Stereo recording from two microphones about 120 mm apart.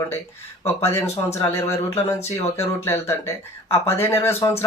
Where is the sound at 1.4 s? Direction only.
20° left (ahead or behind).